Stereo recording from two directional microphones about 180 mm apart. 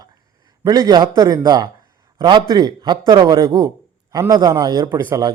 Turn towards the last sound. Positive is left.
turn(degrees=-20)  # may be behind; listen again after turning